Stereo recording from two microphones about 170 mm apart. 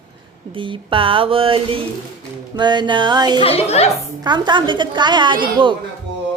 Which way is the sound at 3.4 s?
35° left (ahead or behind).